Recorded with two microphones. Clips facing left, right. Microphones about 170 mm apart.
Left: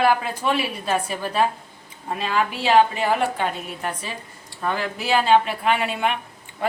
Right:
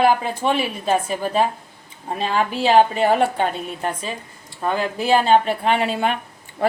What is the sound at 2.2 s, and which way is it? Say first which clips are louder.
Speech: right 3 dB; 45° right (ahead or behind).